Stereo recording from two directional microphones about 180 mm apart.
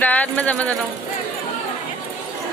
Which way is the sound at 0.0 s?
10° left (ahead or behind).